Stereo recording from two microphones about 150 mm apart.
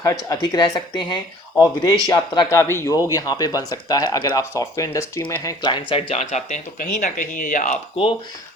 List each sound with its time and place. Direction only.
0.0 s speech: 25° left (ahead or behind); by 6.8 s 50° left (ahead or behind)
6.9 s speech: 60° left (ahead or behind)